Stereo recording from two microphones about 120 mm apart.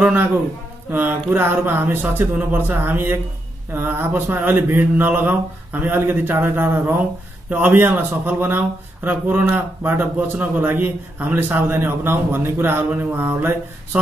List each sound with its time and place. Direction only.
0.0 s speech: 15° right (ahead or behind)